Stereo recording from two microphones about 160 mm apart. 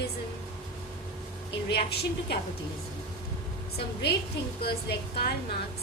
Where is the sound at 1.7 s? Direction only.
90° left.